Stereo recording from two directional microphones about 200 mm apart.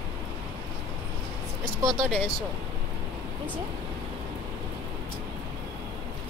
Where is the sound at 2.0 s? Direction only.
5° right (ahead or behind).